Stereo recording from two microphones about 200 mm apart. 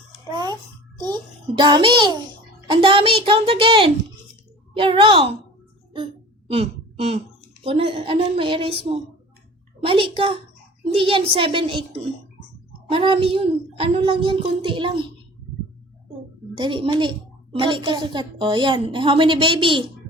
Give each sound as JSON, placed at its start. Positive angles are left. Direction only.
{"t": 0.3, "sound": "a sound", "side_deg": -20}
{"t": 0.9, "sound": "a woman's voice", "side_deg": -20}
{"t": 6.5, "sound": "a woman's voice", "side_deg": -30}
{"t": 16.6, "sound": "a woman's voice", "side_deg": -25}